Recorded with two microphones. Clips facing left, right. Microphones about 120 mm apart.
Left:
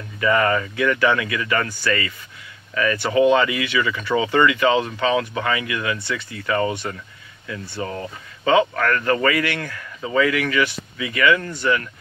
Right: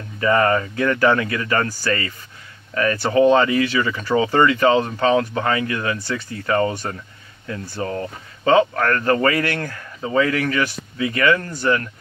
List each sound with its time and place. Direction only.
0.2 s speech: 35° right (ahead or behind)